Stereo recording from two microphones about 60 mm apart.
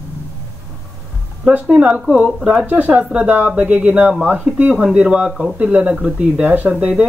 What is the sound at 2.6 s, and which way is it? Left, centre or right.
Speech, right.